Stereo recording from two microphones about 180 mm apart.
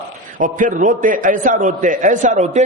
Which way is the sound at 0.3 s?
45° right (ahead or behind).